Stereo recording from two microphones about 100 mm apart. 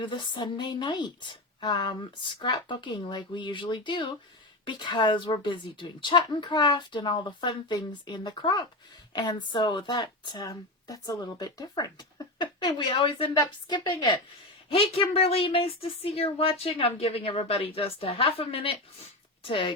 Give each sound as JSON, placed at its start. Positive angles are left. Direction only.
{"t": 0.0, "sound": "speech", "side_deg": 50}
{"t": 10.5, "sound": "speech", "side_deg": 35}
{"t": 14.7, "sound": "speech", "side_deg": 70}